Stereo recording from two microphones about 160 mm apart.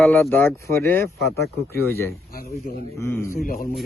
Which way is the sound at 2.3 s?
70° left (ahead or behind).